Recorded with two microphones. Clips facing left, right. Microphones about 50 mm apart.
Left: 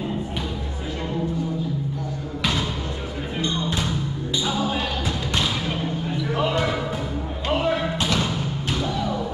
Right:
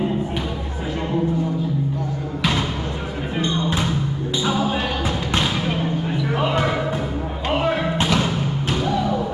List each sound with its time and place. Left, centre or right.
3.3 s music: centre
5.3 s thump: right
6.3 s basketball bounce: centre
7.4 s music: right